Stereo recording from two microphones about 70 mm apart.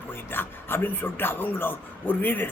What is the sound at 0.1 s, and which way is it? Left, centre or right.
Speech, left.